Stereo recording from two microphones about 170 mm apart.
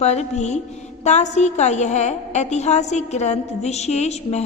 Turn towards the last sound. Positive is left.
turn(degrees=40)  # may be behind; listen again after turning